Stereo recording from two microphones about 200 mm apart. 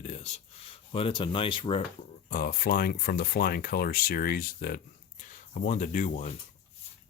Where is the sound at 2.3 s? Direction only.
45° left (ahead or behind).